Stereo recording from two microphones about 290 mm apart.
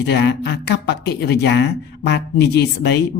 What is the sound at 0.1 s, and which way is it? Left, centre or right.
Speech, left.